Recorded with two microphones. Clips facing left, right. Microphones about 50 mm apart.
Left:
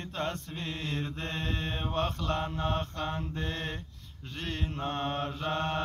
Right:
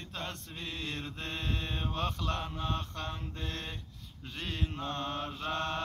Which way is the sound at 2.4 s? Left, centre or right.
Left.